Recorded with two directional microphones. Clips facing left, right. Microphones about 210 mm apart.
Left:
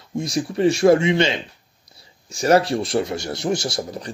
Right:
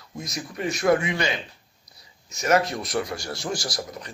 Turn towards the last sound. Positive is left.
turn(degrees=30)  # may be behind; listen again after turning